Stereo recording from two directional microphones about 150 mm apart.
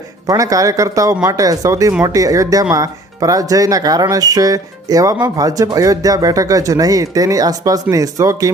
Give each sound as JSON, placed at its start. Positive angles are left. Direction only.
{"t": 0.3, "sound": "speech", "side_deg": -20}